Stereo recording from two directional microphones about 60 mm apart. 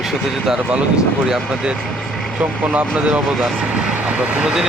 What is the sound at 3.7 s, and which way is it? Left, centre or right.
Vehicle, centre.